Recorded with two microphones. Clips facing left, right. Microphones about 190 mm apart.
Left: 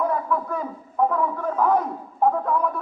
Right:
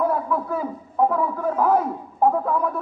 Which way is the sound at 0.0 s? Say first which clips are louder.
Right 1 dB; 5° right (ahead or behind).